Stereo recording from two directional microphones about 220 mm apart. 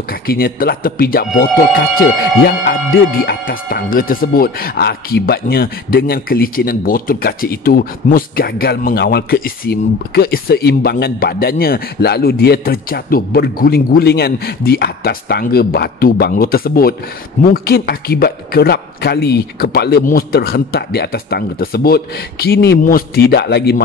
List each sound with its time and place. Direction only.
0.1 s speech: 40° left (ahead or behind)